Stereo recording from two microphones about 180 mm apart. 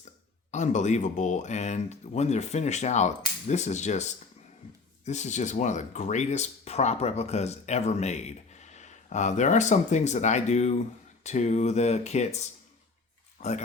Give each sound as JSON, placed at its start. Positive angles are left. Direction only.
{"t": 0.5, "sound": "speech", "side_deg": 40}